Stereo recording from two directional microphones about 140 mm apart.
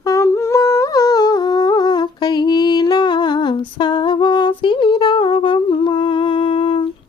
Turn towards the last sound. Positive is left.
turn(degrees=40)  # may be behind; listen again after turning